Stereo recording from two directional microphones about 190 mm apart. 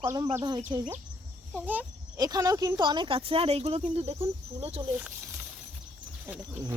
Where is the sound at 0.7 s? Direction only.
15° right (ahead or behind).